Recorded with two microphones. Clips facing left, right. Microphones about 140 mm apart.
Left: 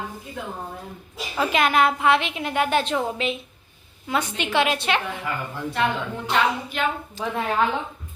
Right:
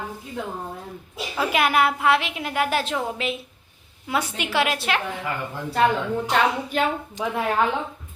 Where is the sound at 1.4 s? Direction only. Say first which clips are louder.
Left 1 dB; 10° right (ahead or behind).